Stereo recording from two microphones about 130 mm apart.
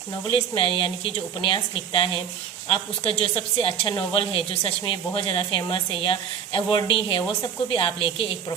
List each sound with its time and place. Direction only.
0.3 s a woman's voice: 40° left (ahead or behind)